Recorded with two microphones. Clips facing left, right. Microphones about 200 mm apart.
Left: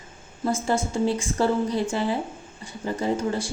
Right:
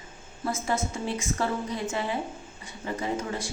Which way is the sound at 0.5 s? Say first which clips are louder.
Left 5 dB; 30° left (ahead or behind).